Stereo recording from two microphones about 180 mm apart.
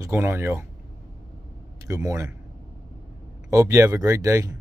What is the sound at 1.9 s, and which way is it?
Speech, 15° right (ahead or behind).